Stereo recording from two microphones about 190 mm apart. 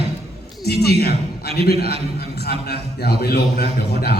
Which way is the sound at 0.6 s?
55° left (ahead or behind).